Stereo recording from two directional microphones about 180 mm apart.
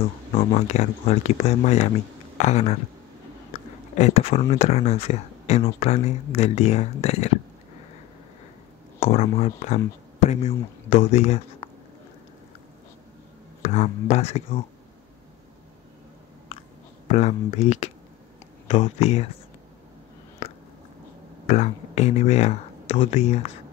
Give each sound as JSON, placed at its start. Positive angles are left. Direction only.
{"t": 0.3, "sound": "speech", "side_deg": 35}
{"t": 3.9, "sound": "speech", "side_deg": 35}
{"t": 9.0, "sound": "speech", "side_deg": 35}
{"t": 10.9, "sound": "speech", "side_deg": 40}
{"t": 13.6, "sound": "speech", "side_deg": 40}
{"t": 17.1, "sound": "speech", "side_deg": 35}
{"t": 21.5, "sound": "speech", "side_deg": 40}